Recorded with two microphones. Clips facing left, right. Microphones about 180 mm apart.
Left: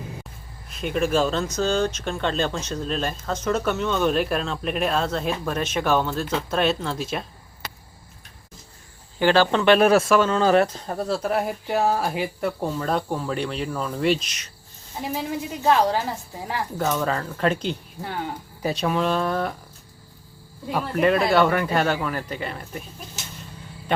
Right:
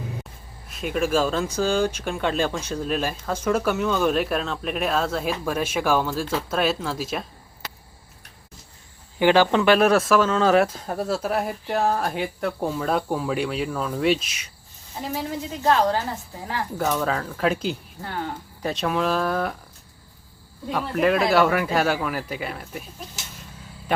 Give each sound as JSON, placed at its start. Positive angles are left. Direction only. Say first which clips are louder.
{"t": 0.7, "sound": "speech", "louder": "even", "side_deg": -5}
{"t": 9.1, "sound": "speech", "louder": "right 1 dB", "side_deg": -15}
{"t": 9.7, "sound": "speech", "louder": "left 2 dB", "side_deg": 0}
{"t": 15.6, "sound": "a woman's voice", "louder": "even", "side_deg": 15}
{"t": 16.7, "sound": "speech", "louder": "even", "side_deg": 0}
{"t": 18.0, "sound": "speech", "louder": "even", "side_deg": 15}
{"t": 18.7, "sound": "speech", "louder": "even", "side_deg": 0}
{"t": 20.7, "sound": "speech", "louder": "left 1 dB", "side_deg": 5}